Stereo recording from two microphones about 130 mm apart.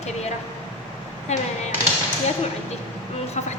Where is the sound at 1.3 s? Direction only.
60° left (ahead or behind).